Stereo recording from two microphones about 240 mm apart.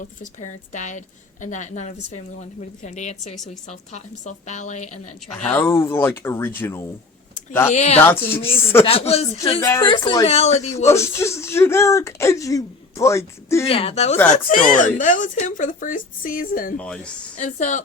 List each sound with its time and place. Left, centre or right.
0.0 s speech: left
5.4 s speech: centre
7.7 s speech: left
8.0 s speech: centre
8.8 s speech: left
9.4 s speech: centre
10.8 s speech: centre
13.7 s speech: left
16.7 s a woman's voice: centre
17.3 s speech: left